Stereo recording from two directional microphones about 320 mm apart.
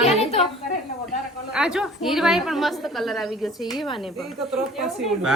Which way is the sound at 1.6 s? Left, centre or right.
Centre.